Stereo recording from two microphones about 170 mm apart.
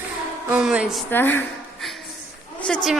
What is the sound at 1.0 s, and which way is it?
Speech, 10° left (ahead or behind).